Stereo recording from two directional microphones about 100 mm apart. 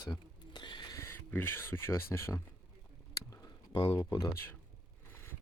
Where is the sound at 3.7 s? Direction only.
50° left (ahead or behind).